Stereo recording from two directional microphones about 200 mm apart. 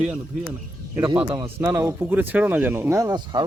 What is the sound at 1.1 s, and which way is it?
Speech, 25° right (ahead or behind).